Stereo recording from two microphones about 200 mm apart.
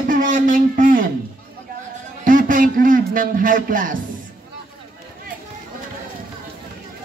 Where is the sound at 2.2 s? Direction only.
40° right (ahead or behind).